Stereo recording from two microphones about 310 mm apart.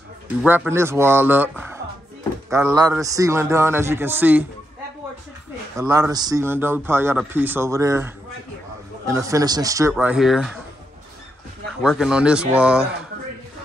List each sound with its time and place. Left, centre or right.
0.4 s speech: centre
5.8 s speech: centre
11.8 s speech: centre